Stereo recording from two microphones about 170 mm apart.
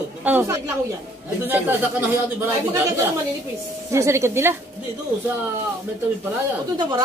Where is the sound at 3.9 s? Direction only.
15° right (ahead or behind).